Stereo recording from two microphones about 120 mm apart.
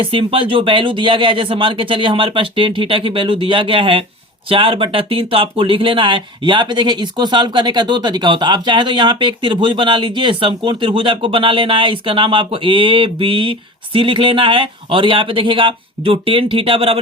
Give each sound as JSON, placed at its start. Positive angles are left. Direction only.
{"t": 0.0, "sound": "speech", "side_deg": -50}